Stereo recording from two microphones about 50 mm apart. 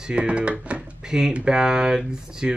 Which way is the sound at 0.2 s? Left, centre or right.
Right.